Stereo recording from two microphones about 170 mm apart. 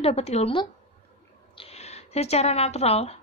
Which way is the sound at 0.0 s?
40° left (ahead or behind).